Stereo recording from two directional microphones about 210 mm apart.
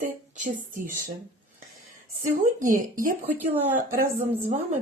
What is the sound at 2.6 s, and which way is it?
Speech, 40° right (ahead or behind).